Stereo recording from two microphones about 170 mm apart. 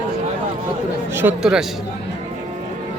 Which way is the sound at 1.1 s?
15° right (ahead or behind).